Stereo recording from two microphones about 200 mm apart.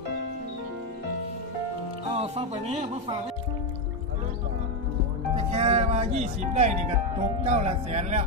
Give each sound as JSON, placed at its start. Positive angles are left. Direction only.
{"t": 2.1, "sound": "speech", "side_deg": -35}
{"t": 5.3, "sound": "speech", "side_deg": -30}